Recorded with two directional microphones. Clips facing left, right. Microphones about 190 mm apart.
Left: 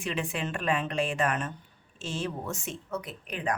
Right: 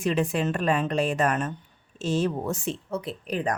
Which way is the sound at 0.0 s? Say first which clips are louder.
Right 8 dB; 40° right (ahead or behind).